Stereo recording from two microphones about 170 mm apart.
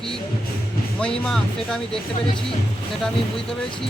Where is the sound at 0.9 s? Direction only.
5° left (ahead or behind).